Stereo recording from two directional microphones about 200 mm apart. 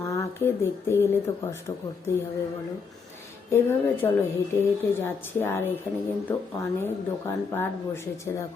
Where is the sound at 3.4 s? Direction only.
10° left (ahead or behind).